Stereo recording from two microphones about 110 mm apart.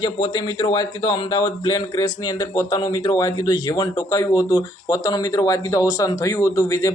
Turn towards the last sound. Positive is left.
turn(degrees=30)  # may be behind; listen again after turning